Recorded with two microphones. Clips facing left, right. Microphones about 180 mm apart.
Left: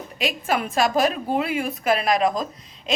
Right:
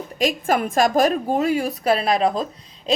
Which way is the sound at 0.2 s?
45° right (ahead or behind).